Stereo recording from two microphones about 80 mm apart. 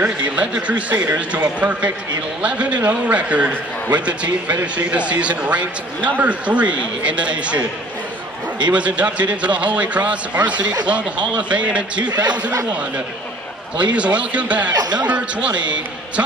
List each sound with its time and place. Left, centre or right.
0.0 s a man's voice: centre
8.7 s a man's voice: centre
12.0 s speech: right
13.9 s a man's voice: centre
14.7 s speech: right
15.0 s a man's voice: centre